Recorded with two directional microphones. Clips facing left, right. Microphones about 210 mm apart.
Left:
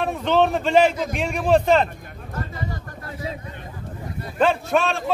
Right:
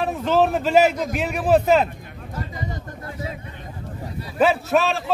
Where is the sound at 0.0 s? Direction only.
5° right (ahead or behind).